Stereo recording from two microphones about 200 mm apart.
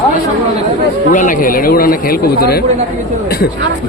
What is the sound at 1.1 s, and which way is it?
Speech, 40° left (ahead or behind).